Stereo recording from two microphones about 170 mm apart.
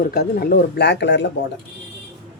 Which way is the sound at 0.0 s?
65° left (ahead or behind).